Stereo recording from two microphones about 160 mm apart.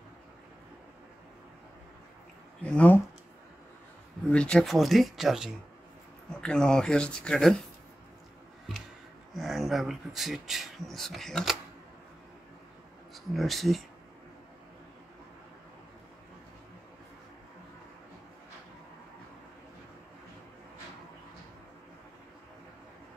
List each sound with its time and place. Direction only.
2.6 s speech: 10° left (ahead or behind)
4.3 s speech: 5° left (ahead or behind)
9.3 s speech: centre (ahead or behind)
13.1 s speech: centre (ahead or behind)